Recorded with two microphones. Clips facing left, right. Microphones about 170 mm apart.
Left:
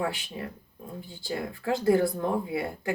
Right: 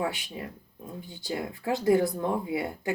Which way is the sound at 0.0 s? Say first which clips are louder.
Even; 20° right (ahead or behind).